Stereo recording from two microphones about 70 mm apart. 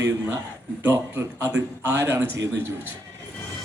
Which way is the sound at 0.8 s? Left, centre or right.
Right.